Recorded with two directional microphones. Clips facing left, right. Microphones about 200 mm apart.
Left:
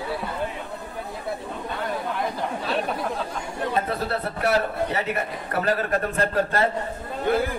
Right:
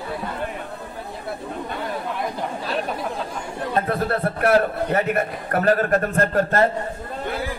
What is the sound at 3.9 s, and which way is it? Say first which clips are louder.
A man's voice: right 4 dB; 50° right (ahead or behind).